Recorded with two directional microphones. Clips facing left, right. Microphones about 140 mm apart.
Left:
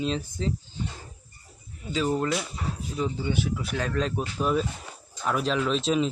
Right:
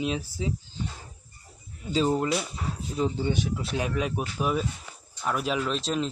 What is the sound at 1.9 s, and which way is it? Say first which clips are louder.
Speech: right 1 dB; 30° right (ahead or behind).